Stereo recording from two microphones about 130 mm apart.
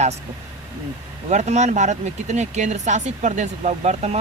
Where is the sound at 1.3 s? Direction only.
60° right (ahead or behind).